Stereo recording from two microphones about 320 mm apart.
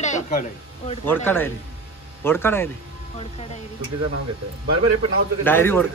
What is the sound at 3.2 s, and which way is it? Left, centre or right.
Speech, centre.